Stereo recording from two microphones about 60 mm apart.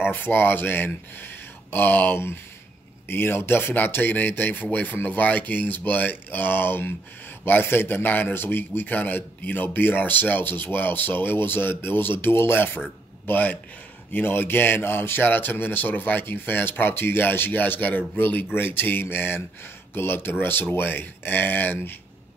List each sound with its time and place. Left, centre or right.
0.1 s a man's voice: left